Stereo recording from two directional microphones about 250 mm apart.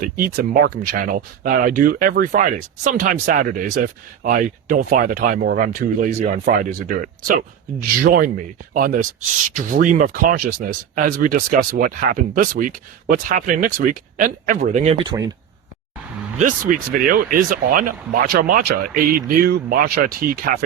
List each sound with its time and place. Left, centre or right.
0.0 s speech: right
15.0 s speech: centre
16.4 s speech: right